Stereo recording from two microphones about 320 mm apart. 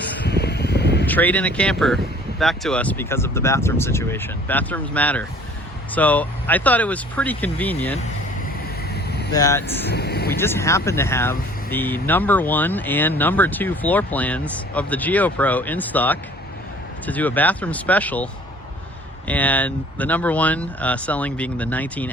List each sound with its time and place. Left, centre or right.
0.3 s a sound: left
1.0 s speech: centre
9.3 s speech: centre
9.8 s speech: left
10.3 s speech: centre
19.3 s speech: centre